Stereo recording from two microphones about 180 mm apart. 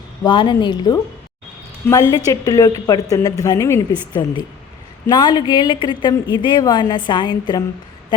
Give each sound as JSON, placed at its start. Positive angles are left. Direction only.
{"t": 0.3, "sound": "a woman's voice", "side_deg": 25}